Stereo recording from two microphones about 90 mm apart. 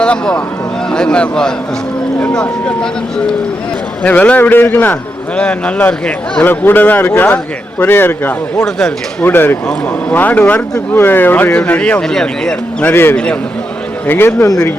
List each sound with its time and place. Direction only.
0.0 s a man's voice: 10° left (ahead or behind)
5.4 s speech: 10° left (ahead or behind)
6.4 s a man's voice: 20° left (ahead or behind)
12.8 s a man's voice: 25° left (ahead or behind)
14.4 s speech: 40° left (ahead or behind)